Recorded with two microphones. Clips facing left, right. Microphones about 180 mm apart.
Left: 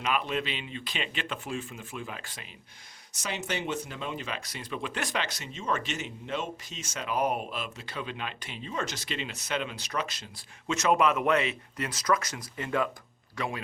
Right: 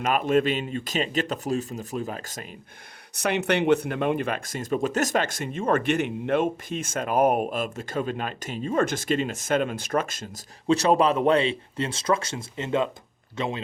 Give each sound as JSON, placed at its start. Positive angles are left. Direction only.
{"t": 0.0, "sound": "speech", "side_deg": -45}
{"t": 3.2, "sound": "speech", "side_deg": -60}
{"t": 10.7, "sound": "speech", "side_deg": -35}